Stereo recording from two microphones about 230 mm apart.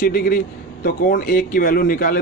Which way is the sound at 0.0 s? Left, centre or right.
Left.